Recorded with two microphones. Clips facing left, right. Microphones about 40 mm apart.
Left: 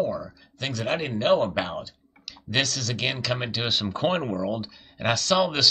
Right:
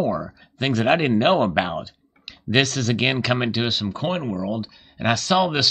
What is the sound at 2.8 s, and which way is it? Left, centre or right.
Speech, right.